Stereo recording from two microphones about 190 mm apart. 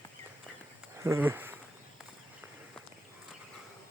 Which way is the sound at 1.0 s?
15° right (ahead or behind).